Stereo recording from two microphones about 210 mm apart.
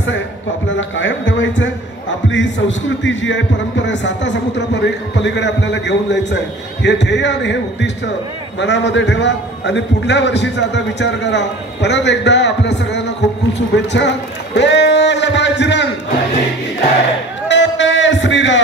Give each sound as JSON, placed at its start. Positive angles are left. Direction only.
{"t": 0.7, "sound": "a man's voice", "side_deg": 65}
{"t": 13.2, "sound": "a sound", "side_deg": 55}
{"t": 13.6, "sound": "a man's voice", "side_deg": 55}
{"t": 17.5, "sound": "music", "side_deg": 60}